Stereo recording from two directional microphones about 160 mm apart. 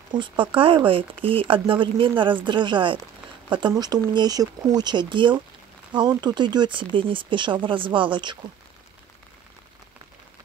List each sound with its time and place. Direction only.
0.1 s speech: 30° right (ahead or behind)